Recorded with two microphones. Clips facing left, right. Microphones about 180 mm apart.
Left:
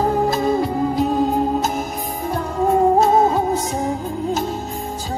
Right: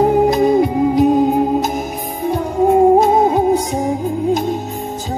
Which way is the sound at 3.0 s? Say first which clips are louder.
Right 2 dB; 15° right (ahead or behind).